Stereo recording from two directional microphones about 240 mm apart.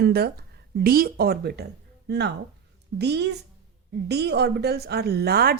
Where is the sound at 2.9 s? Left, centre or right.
Right.